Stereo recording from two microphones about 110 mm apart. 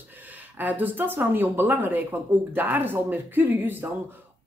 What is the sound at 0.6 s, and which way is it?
Speech, 15° right (ahead or behind).